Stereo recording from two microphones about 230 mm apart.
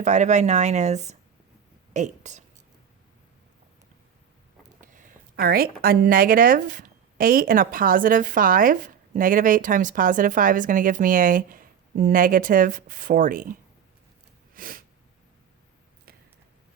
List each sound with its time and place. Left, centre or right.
0.0 s speech: right
4.8 s speech: right
14.5 s a sound: right